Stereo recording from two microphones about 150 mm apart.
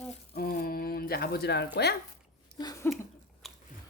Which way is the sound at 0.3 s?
80° left.